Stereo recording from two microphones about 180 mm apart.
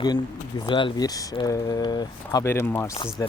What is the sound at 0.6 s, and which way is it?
Speech, 25° left (ahead or behind).